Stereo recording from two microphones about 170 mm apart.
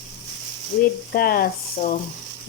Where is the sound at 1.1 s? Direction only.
60° left (ahead or behind).